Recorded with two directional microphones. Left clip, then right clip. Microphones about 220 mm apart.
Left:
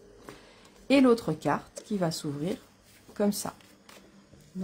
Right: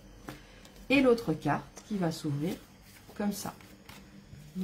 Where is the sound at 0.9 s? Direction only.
45° left (ahead or behind).